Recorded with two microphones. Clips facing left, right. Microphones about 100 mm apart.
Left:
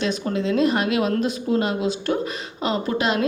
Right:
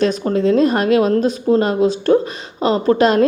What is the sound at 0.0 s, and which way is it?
A woman's voice, 40° right (ahead or behind).